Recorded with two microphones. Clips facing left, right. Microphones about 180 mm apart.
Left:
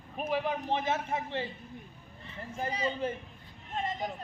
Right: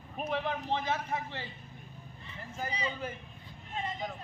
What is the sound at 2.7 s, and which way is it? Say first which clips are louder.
Speech: left 5 dB; 45° left (ahead or behind).